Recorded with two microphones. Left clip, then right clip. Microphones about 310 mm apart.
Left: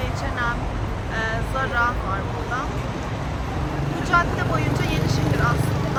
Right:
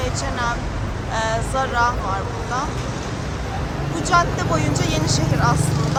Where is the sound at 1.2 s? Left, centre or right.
Centre.